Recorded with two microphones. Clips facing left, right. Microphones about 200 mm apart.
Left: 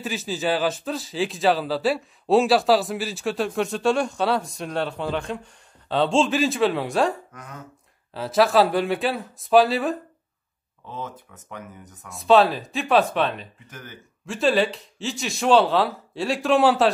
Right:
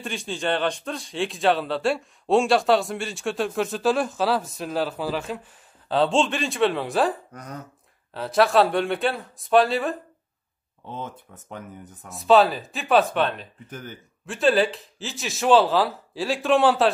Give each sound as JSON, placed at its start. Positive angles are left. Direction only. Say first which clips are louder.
{"t": 0.0, "sound": "a man's voice", "louder": "left 2 dB", "side_deg": 5}
{"t": 7.3, "sound": "a sound", "louder": "right 3 dB", "side_deg": -40}
{"t": 8.1, "sound": "a man's voice", "louder": "left 1 dB", "side_deg": 0}
{"t": 10.9, "sound": "speech", "louder": "even", "side_deg": -30}
{"t": 12.1, "sound": "a man's voice", "louder": "even", "side_deg": 0}